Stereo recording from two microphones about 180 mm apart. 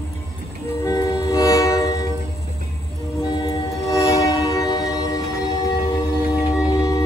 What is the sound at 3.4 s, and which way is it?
Train, 15° left (ahead or behind).